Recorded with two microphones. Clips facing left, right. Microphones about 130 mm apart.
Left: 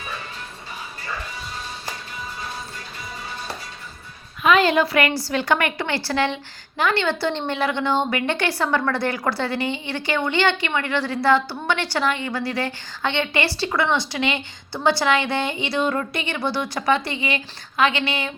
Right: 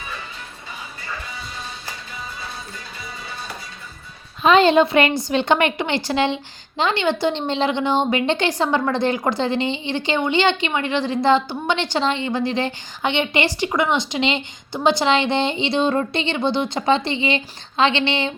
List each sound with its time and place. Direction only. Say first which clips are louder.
4.4 s a woman's voice: right 4 dB; 25° right (ahead or behind)